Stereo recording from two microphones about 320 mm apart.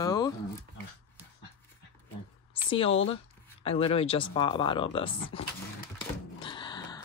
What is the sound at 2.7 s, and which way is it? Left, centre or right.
Speech, centre.